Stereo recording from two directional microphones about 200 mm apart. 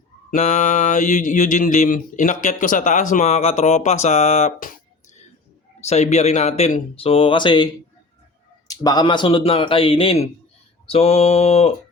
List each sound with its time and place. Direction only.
0.3 s mantra: 35° left (ahead or behind)
5.8 s mantra: 35° left (ahead or behind)
8.6 s speech: 20° left (ahead or behind)
10.8 s mantra: 30° left (ahead or behind)